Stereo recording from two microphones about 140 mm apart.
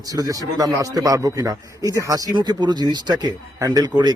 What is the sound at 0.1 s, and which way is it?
A man's voice, 25° right (ahead or behind).